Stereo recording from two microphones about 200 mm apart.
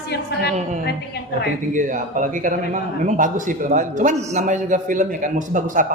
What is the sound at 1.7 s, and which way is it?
A man's voice, 40° right (ahead or behind).